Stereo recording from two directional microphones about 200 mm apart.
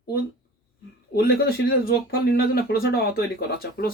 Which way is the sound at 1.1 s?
50° left (ahead or behind).